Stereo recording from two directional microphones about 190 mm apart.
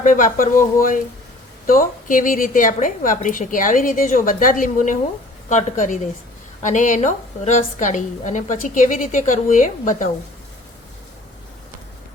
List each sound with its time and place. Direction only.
0.0 s a woman's voice: 45° left (ahead or behind)